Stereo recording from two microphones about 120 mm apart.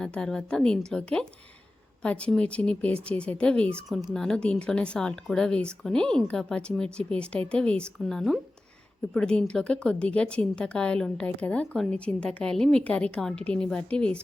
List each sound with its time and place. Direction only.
0.0 s a woman's voice: 5° left (ahead or behind)